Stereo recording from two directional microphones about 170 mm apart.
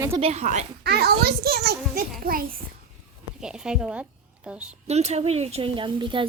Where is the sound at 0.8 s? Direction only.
70° right (ahead or behind).